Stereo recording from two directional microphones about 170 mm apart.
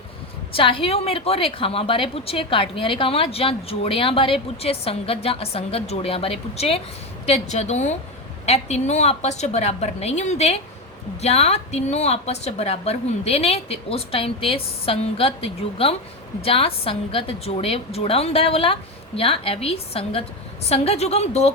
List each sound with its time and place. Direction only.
0.5 s a woman's voice: 30° left (ahead or behind)